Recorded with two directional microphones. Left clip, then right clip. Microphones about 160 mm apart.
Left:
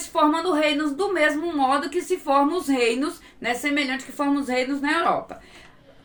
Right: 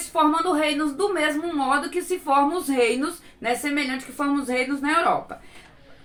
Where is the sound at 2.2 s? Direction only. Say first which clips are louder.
Right 1 dB; 20° left (ahead or behind).